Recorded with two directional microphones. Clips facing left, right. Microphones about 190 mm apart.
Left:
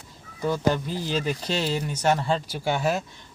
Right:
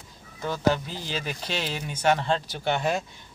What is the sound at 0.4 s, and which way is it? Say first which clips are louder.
Speech: left 1 dB; 15° left (ahead or behind).